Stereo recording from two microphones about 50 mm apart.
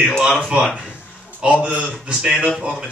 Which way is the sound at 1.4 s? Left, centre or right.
Right.